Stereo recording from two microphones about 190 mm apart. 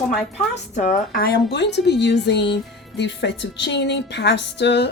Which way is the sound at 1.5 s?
65° left (ahead or behind).